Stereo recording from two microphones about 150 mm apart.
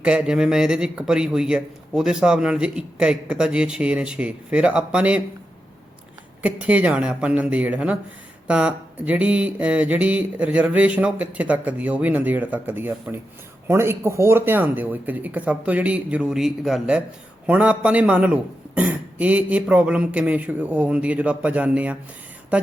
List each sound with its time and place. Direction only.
0.0 s speech: 5° right (ahead or behind)
6.4 s speech: 10° right (ahead or behind)